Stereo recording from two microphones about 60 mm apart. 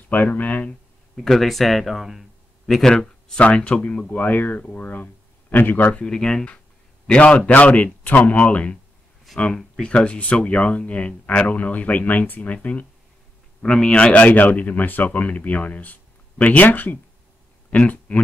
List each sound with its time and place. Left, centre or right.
0.1 s speech: left
0.7 s speech: centre
2.9 s speech: centre
4.1 s speech: left
5.9 s speech: centre